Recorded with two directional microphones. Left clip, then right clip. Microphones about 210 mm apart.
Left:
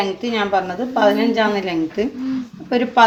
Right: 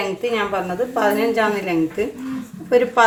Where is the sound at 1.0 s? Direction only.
35° left (ahead or behind).